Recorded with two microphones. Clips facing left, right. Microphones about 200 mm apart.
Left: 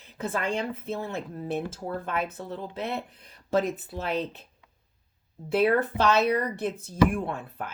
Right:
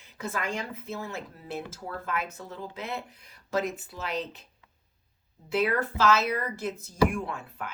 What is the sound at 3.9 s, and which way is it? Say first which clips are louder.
Speech: left 4 dB; 55° left (ahead or behind).